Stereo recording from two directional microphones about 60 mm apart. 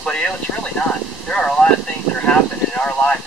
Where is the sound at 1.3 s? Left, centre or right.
Centre.